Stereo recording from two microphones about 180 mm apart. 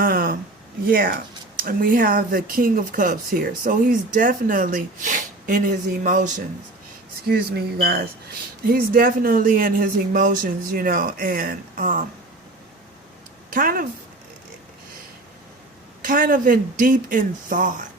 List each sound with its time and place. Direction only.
0.0 s a sound: 55° right (ahead or behind)
0.9 s speech: 55° right (ahead or behind)
7.3 s speech: 60° right (ahead or behind)
13.5 s speech: 50° right (ahead or behind)
16.0 s speech: 50° right (ahead or behind)